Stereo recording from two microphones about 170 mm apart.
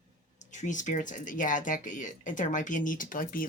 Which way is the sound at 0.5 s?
45° left (ahead or behind).